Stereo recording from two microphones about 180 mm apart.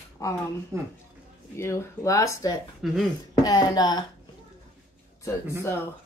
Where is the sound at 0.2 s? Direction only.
20° left (ahead or behind).